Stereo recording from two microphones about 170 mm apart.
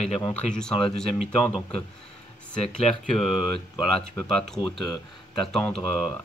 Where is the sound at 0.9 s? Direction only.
Centre (ahead or behind).